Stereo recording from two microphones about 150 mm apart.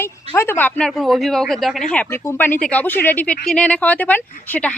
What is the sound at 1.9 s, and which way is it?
Speech, 10° left (ahead or behind).